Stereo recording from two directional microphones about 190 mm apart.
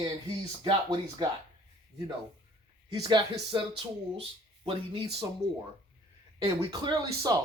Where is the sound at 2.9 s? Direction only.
25° right (ahead or behind).